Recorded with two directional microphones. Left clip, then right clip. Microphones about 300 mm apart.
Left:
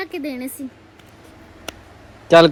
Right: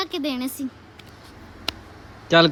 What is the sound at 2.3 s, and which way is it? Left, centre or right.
Speech, centre.